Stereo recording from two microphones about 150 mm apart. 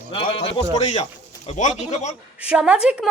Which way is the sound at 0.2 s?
35° left (ahead or behind).